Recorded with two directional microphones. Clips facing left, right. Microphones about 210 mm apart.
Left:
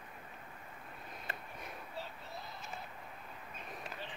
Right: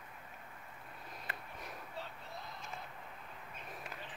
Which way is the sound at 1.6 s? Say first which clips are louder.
Left 1 dB; 5° left (ahead or behind).